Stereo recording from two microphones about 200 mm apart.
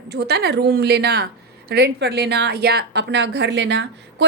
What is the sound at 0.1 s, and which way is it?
A woman's voice, 55° right (ahead or behind).